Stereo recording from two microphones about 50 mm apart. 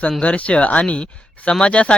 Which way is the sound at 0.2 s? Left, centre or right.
Left.